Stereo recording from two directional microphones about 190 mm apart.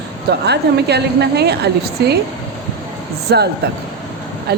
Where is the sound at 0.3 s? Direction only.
60° right (ahead or behind).